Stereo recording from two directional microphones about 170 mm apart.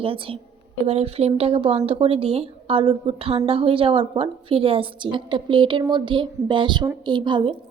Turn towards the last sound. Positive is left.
turn(degrees=-30)  # may be behind; listen again after turning